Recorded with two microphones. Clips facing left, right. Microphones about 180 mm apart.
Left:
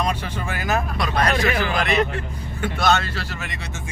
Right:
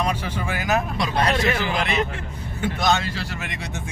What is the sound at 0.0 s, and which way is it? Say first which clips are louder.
Vehicle: even; 10° right (ahead or behind).